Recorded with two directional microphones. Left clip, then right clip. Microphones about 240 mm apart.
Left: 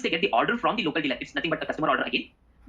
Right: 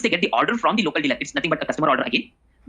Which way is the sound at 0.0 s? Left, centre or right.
Right.